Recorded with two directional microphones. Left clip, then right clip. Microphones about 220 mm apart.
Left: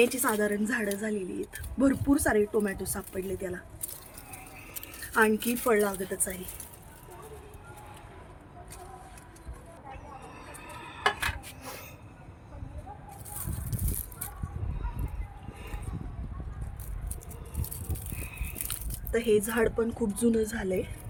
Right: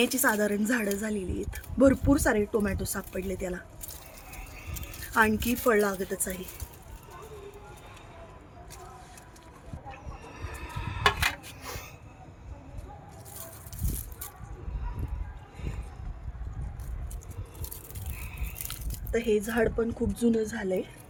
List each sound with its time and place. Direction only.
0.0 s a woman's voice: 55° right (ahead or behind)
5.1 s a woman's voice: 50° right (ahead or behind)
10.4 s dishes: 40° right (ahead or behind)
11.6 s vehicle: 25° right (ahead or behind)
18.1 s biting: 10° right (ahead or behind)
18.6 s speech: centre (ahead or behind)